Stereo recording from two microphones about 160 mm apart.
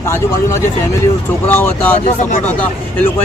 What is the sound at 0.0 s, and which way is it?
Speech, 15° left (ahead or behind).